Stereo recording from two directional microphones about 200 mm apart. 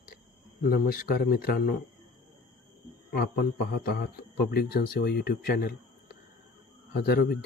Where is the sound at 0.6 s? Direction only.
50° left (ahead or behind).